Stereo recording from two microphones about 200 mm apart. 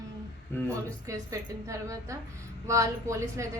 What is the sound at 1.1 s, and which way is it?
A woman's voice, 15° right (ahead or behind).